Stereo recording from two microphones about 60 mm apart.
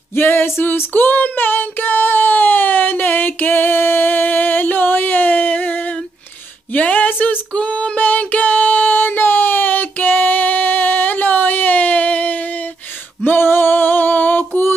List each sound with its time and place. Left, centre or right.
0.1 s child singing: left
6.7 s a sound: left
13.2 s female singing: left